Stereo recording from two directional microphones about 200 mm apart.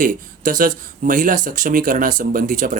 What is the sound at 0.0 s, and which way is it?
Speech, 40° right (ahead or behind).